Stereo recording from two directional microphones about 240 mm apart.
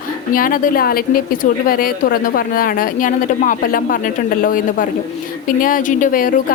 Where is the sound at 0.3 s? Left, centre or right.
Left.